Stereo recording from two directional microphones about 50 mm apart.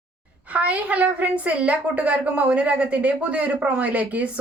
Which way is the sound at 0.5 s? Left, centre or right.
Right.